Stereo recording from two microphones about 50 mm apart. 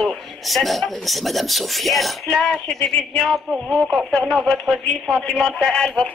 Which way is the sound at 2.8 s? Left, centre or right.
Left.